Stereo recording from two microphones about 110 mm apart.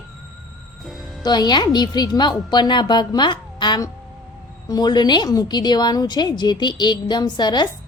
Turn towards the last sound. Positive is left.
turn(degrees=40)  # may be behind; listen again after turning